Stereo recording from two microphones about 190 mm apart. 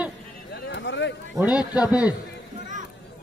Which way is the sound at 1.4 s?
5° right (ahead or behind).